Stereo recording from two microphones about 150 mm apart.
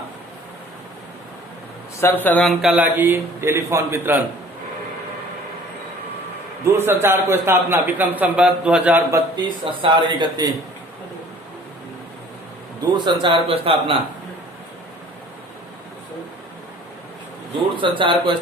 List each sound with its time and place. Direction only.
2.0 s speech: 15° left (ahead or behind)
2.4 s a man's voice: centre (ahead or behind)
6.7 s a man's voice: 15° right (ahead or behind)
9.3 s speech: 30° right (ahead or behind)
13.2 s speech: 35° right (ahead or behind)
17.7 s speech: 35° right (ahead or behind)